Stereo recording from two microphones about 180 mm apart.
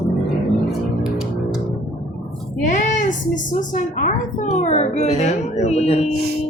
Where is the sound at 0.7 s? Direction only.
5° right (ahead or behind).